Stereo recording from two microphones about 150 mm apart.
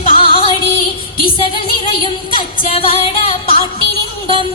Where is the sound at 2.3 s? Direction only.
35° left (ahead or behind).